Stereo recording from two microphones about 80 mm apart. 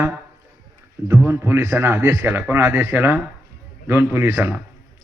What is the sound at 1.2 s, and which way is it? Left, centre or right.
A man's voice, right.